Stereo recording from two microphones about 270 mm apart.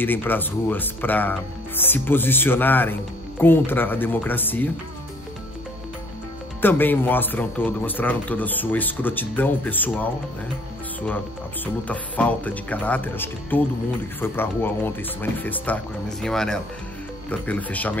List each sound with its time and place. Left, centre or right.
0.0 s speech: centre
6.6 s speech: centre
11.6 s speech: centre